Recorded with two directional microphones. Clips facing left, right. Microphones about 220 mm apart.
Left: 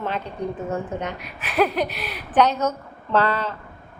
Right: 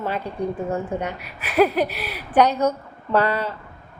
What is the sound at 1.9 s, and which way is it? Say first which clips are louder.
Speech: right 1 dB; 40° right (ahead or behind).